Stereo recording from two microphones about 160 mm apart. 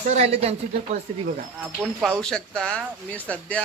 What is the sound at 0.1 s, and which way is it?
Speech, 40° right (ahead or behind).